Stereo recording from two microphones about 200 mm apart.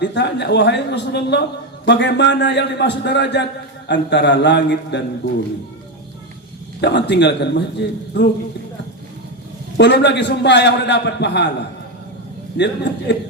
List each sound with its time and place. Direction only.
0.0 s a man's voice: 60° left (ahead or behind)
6.8 s a man's voice: 60° left (ahead or behind)
9.7 s a man's voice: 60° left (ahead or behind)
12.5 s a man's voice: 60° left (ahead or behind)